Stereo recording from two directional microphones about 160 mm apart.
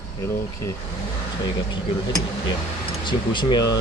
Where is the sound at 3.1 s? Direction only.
30° left (ahead or behind).